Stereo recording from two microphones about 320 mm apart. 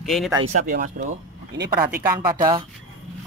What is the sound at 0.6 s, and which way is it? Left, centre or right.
Speech, right.